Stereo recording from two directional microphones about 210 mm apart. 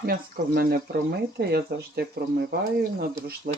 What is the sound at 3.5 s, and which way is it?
Speech, 40° right (ahead or behind).